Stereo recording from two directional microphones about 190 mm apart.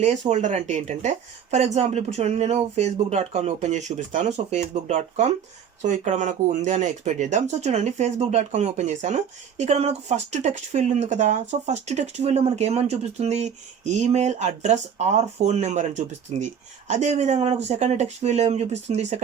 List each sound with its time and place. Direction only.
0.0 s speech: 35° right (ahead or behind)